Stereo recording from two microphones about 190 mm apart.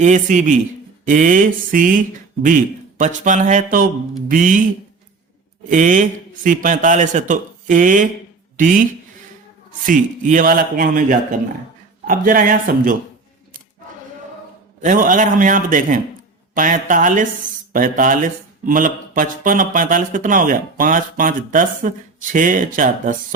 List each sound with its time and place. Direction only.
0.0 s a man's voice: 40° right (ahead or behind)
5.6 s speech: 45° right (ahead or behind)
9.8 s speech: 45° right (ahead or behind)
14.8 s speech: 45° right (ahead or behind)